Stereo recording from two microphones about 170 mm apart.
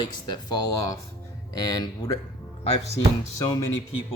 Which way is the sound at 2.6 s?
40° left (ahead or behind).